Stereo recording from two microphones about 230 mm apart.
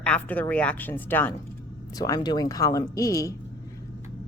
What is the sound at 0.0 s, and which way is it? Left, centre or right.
Speech, centre.